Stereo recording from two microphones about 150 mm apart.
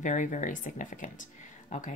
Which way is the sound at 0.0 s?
55° left (ahead or behind).